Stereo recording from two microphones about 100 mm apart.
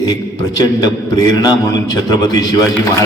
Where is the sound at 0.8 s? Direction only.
40° left (ahead or behind).